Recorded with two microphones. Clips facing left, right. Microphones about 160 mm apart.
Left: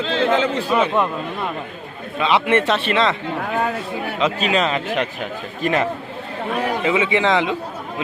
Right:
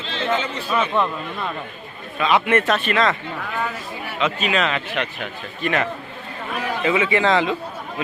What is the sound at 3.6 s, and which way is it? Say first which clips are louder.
Speech: left 5 dB; 60° left (ahead or behind).